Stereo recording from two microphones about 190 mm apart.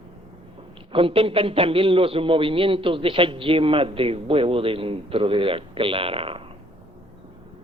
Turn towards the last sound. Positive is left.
turn(degrees=-30)  # may be behind; listen again after turning